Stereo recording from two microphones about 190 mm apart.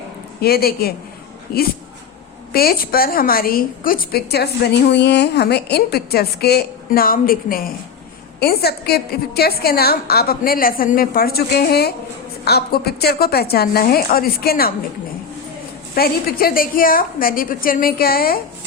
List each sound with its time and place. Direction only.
0.4 s a woman's voice: 55° left (ahead or behind)
16.0 s a woman's voice: 50° left (ahead or behind)